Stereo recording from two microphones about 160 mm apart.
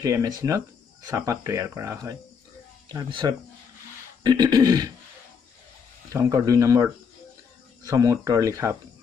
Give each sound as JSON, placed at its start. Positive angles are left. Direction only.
{"t": 0.0, "sound": "speech", "side_deg": -20}
{"t": 6.1, "sound": "speech", "side_deg": -20}